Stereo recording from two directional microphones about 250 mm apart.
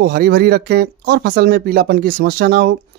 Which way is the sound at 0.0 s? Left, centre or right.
Right.